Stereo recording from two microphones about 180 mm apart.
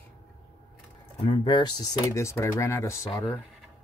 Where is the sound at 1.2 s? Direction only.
25° left (ahead or behind).